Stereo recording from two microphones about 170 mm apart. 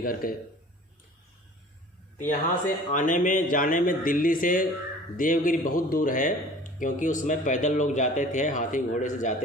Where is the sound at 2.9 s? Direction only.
50° left (ahead or behind).